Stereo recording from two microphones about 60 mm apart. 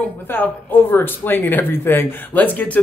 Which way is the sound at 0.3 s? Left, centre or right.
Left.